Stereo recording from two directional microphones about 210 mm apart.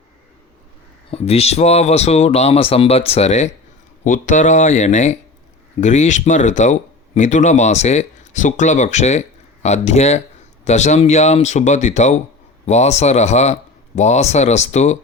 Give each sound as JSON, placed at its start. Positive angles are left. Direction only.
{"t": 1.1, "sound": "speech", "side_deg": 30}